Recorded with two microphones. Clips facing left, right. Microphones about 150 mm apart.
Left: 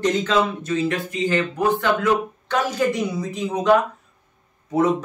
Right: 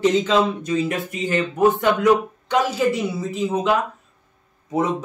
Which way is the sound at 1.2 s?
25° right (ahead or behind).